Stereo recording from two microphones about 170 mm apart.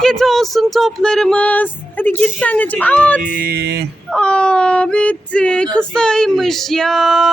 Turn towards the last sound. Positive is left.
turn(degrees=0)  # may be behind; listen again after turning